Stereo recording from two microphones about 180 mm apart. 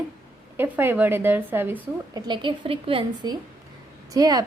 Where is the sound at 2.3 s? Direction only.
30° right (ahead or behind).